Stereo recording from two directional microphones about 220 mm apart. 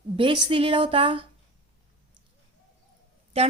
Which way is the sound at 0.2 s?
20° right (ahead or behind).